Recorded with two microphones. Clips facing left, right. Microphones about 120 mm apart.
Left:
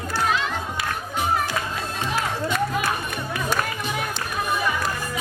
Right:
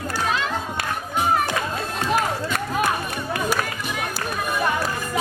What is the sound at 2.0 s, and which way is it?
Music, 45° right (ahead or behind).